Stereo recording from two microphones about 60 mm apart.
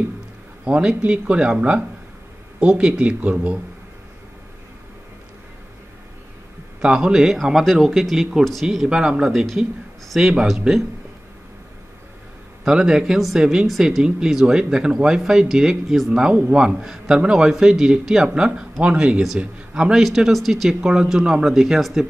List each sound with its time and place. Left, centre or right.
0.7 s a man's voice: centre
6.8 s a man's voice: centre
12.6 s a man's voice: centre